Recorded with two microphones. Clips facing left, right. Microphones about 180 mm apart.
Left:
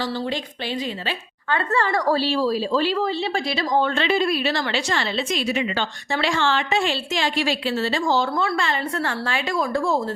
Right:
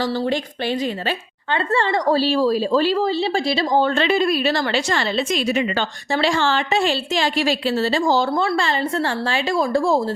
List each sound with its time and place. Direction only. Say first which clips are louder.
1.5 s a woman's voice: right 2 dB; 25° right (ahead or behind)
2.1 s a woman's voice: right 4 dB; 45° right (ahead or behind)
6.1 s a woman's voice: right 3 dB; 35° right (ahead or behind)